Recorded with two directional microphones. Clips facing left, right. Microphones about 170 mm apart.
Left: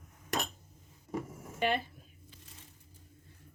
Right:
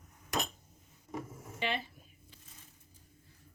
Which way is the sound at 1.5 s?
50° left (ahead or behind).